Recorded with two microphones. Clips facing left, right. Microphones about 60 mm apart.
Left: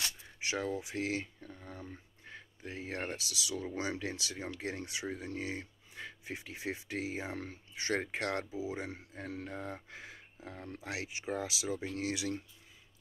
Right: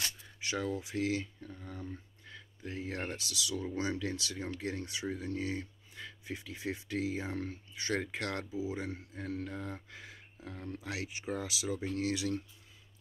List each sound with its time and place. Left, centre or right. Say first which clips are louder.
0.4 s speech: even; left